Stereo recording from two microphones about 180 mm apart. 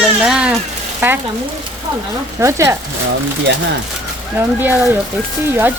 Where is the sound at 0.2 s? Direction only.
5° right (ahead or behind).